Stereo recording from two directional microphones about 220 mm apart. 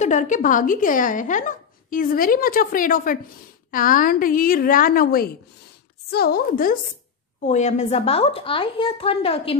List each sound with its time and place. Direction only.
0.0 s a woman's voice: 35° left (ahead or behind)